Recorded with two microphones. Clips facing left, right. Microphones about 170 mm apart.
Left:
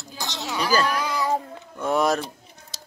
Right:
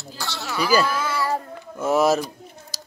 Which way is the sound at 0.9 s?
15° left (ahead or behind).